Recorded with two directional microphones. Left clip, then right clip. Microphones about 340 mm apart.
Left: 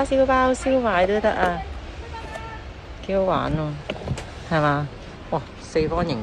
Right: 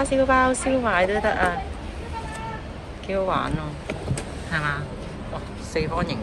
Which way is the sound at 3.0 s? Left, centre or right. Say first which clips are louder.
Left 2 dB; centre.